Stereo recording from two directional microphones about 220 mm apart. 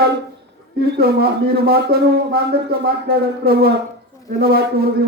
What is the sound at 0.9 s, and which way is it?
A man's voice, 45° right (ahead or behind).